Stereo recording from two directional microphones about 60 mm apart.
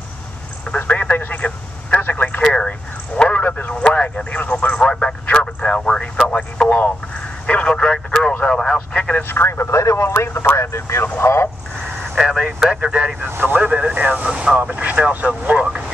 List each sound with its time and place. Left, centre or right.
0.7 s speech: left
2.0 s vehicle: left
3.2 s a sound: left
3.9 s speech: left
9.3 s speech: left
12.2 s speech: centre
12.8 s speech: right
13.3 s speech: right